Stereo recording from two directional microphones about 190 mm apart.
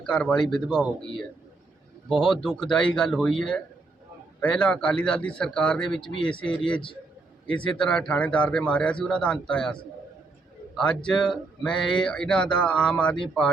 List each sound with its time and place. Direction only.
0.0 s speech: 5° left (ahead or behind)
6.1 s speech: 25° left (ahead or behind)
7.6 s speech: 5° left (ahead or behind)
10.8 s speech: 5° left (ahead or behind)